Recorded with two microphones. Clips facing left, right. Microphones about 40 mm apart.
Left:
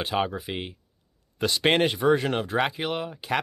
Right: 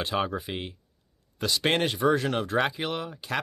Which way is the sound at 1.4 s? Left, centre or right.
Left.